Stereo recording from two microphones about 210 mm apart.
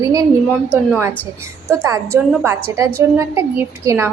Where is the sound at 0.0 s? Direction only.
15° right (ahead or behind).